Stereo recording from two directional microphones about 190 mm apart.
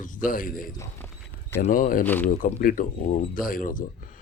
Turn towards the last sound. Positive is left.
turn(degrees=45)  # may be behind; listen again after turning